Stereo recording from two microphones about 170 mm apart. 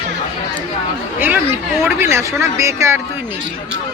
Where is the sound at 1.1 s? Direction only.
10° right (ahead or behind).